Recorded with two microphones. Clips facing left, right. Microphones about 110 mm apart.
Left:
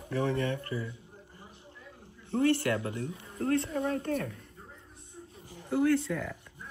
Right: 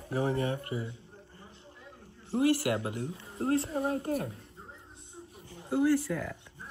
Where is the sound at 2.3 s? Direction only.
25° right (ahead or behind).